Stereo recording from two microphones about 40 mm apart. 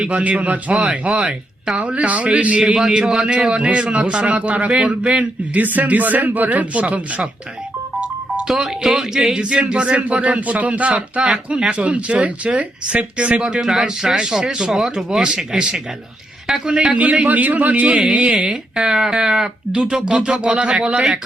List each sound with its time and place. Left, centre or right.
0.0 s speech: right
2.7 s a man's voice: centre
3.2 s speech: right
5.5 s speech: right
8.4 s speech: centre
17.0 s speech: right
18.7 s speech: centre